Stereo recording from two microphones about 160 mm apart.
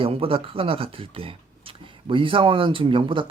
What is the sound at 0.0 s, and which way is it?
Speech, 35° right (ahead or behind).